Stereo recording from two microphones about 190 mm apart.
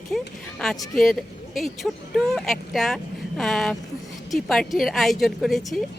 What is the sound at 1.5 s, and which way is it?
Speech, centre (ahead or behind).